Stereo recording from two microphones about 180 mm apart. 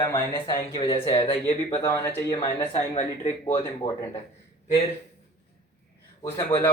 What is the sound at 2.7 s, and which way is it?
Speech, 40° left (ahead or behind).